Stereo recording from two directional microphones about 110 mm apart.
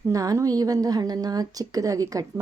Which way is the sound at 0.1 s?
30° right (ahead or behind).